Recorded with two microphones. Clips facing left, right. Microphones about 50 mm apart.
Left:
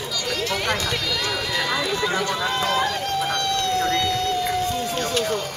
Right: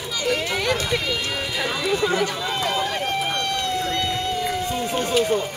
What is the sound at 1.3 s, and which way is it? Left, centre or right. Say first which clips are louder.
Run: left 1 dB; centre.